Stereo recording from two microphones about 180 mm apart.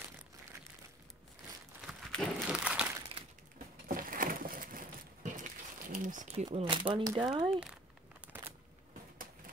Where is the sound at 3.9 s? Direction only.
50° right (ahead or behind).